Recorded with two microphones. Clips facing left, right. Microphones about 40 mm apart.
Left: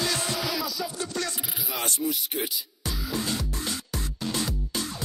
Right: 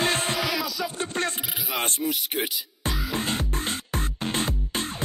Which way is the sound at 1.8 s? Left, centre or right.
Right.